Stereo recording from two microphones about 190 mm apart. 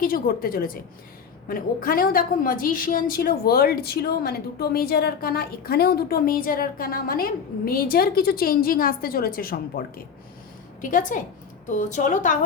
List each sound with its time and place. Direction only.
0.0 s a woman's voice: 50° left (ahead or behind)